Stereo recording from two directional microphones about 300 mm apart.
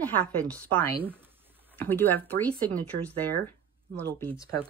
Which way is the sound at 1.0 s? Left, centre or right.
Centre.